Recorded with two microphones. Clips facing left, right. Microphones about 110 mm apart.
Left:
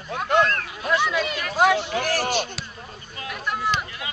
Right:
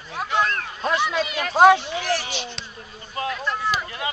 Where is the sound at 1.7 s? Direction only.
45° left (ahead or behind).